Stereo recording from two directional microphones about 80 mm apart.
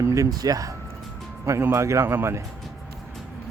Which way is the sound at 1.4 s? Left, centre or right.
Right.